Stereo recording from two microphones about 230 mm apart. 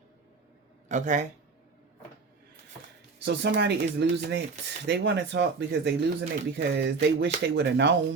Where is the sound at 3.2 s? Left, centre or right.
Right.